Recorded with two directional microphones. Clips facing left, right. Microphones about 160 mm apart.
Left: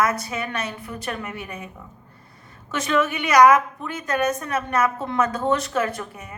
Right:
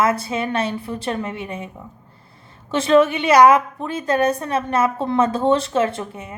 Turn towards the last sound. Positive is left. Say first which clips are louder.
# right 3 dB
turn(degrees=-25)  # may be behind; listen again after turning